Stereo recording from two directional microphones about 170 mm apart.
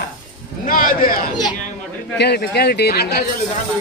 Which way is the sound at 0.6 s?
55° left (ahead or behind).